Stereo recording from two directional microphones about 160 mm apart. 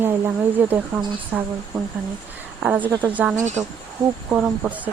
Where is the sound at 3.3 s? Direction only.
50° right (ahead or behind).